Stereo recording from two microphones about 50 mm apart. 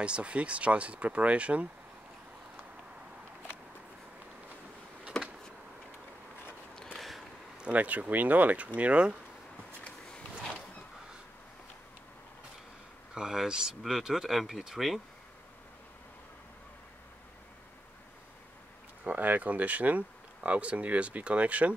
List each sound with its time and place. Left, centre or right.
0.0 s speech: right
5.1 s a sound: centre
7.0 s a sound: centre
7.7 s speech: right
13.1 s speech: centre
19.0 s speech: right